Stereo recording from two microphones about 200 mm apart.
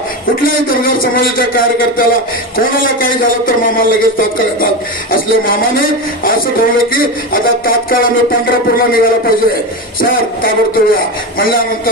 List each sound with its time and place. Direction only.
0.4 s speech: 45° left (ahead or behind)